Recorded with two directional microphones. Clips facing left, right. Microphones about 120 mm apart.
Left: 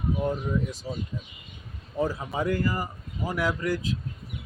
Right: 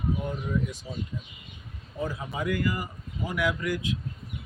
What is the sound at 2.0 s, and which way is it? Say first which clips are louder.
Speech: left 4 dB; 35° left (ahead or behind).